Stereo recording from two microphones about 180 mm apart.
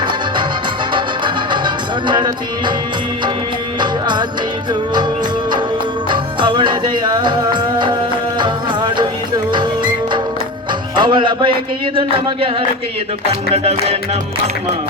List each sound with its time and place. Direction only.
0.9 s music: 25° right (ahead or behind)
3.8 s music: 25° right (ahead or behind)
6.1 s music: 25° right (ahead or behind)
11.9 s speech: 30° right (ahead or behind)